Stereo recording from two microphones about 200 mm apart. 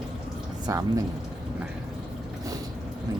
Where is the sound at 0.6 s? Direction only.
15° right (ahead or behind).